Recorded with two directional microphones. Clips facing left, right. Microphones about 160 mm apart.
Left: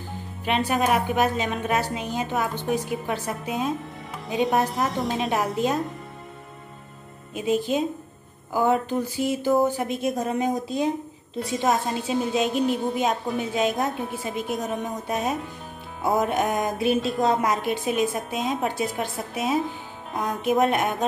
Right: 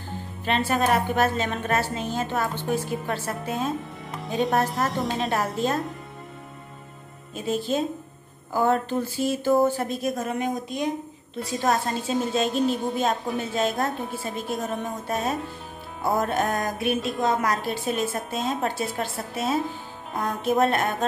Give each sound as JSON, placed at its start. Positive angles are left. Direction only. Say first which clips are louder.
{"t": 0.5, "sound": "a woman's voice", "louder": "even", "side_deg": 15}
{"t": 4.1, "sound": "speech", "louder": "left 1 dB", "side_deg": 0}
{"t": 7.3, "sound": "a woman's voice", "louder": "left 2 dB", "side_deg": 15}
{"t": 10.0, "sound": "a woman's voice", "louder": "left 3 dB", "side_deg": 30}
{"t": 11.6, "sound": "speech", "louder": "even", "side_deg": 0}
{"t": 12.3, "sound": "a woman's voice", "louder": "left 1 dB", "side_deg": 15}
{"t": 16.0, "sound": "music", "louder": "left 2 dB", "side_deg": 0}
{"t": 16.3, "sound": "a woman's voice", "louder": "left 1 dB", "side_deg": 15}